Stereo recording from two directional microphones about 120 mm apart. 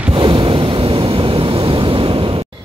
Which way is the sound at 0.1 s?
40° right (ahead or behind).